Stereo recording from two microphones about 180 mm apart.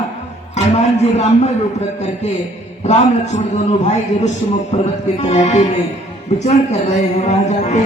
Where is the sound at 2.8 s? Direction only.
40° left (ahead or behind).